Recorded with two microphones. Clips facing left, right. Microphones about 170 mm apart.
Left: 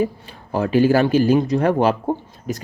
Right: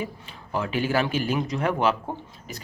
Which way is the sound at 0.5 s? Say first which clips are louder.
Left 9 dB; 40° left (ahead or behind).